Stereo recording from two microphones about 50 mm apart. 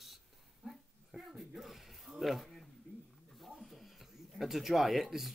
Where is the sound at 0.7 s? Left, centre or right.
Centre.